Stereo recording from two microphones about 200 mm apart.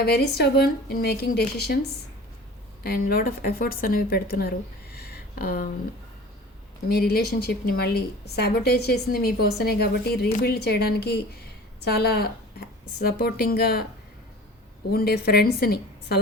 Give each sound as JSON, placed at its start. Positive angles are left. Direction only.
{"t": 0.0, "sound": "a woman's voice", "side_deg": 50}
{"t": 2.8, "sound": "a woman's voice", "side_deg": 50}
{"t": 6.8, "sound": "a woman's voice", "side_deg": 50}
{"t": 14.9, "sound": "a woman's voice", "side_deg": 50}